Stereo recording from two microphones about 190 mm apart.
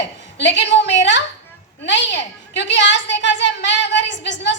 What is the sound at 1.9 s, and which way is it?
Female singing, 70° left (ahead or behind).